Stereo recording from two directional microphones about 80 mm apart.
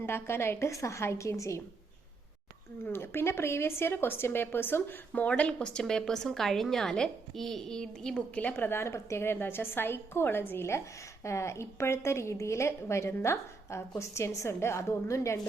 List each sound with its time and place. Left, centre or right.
0.0 s a woman's voice: left
2.8 s a woman's voice: left; by 8.2 s centre
8.4 s a woman's voice: left